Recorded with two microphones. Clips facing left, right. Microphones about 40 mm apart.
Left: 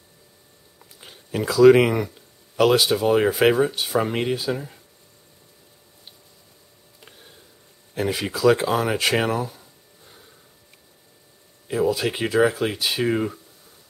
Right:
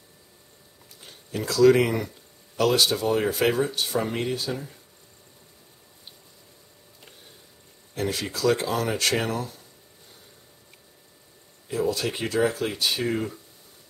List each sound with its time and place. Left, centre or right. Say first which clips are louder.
1.0 s a sound: left 5 dB; centre
1.8 s speech: left 4 dB; left
7.9 s speech: left 4 dB; centre
11.7 s speech: left 4 dB; centre
13.0 s speech: left 5 dB; left